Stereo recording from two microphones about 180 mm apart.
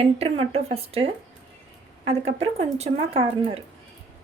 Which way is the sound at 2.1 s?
35° right (ahead or behind).